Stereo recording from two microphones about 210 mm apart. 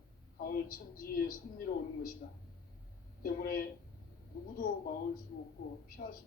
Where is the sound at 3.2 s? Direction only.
45° left (ahead or behind).